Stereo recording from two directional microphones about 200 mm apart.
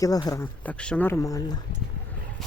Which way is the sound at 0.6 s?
5° left (ahead or behind).